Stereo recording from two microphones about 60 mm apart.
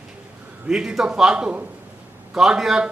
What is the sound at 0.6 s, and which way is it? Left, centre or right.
Speech, centre.